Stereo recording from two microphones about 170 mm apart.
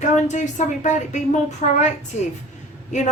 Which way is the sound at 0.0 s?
45° left (ahead or behind).